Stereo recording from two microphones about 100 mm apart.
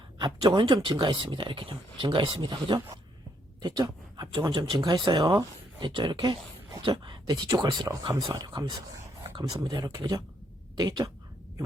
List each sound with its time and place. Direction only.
0.2 s speech: 50° right (ahead or behind)